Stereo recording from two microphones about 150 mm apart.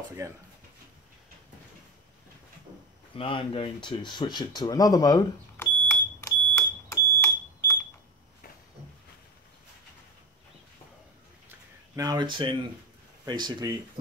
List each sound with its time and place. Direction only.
0.2 s speech: 20° right (ahead or behind)
3.2 s speech: 35° left (ahead or behind)
5.9 s smoke detector: 15° left (ahead or behind)
11.9 s speech: 25° right (ahead or behind)